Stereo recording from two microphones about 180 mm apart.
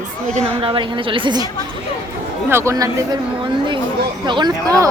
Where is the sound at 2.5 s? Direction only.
15° right (ahead or behind).